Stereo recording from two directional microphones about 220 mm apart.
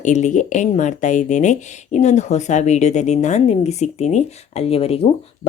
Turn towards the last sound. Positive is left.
turn(degrees=25)  # may be behind; listen again after turning